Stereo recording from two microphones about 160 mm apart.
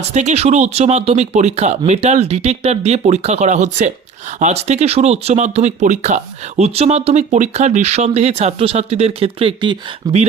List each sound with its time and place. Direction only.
0.1 s speech: 45° right (ahead or behind)
10.0 s speech: 20° right (ahead or behind)